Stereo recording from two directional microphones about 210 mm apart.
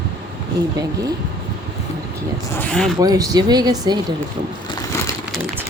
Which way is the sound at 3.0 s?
15° right (ahead or behind).